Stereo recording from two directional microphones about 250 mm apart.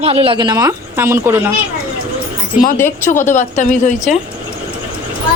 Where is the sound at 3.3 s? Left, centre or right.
Left.